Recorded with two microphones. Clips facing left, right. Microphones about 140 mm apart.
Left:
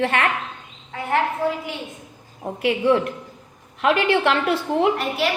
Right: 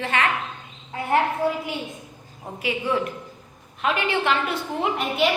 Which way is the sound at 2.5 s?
60° left (ahead or behind).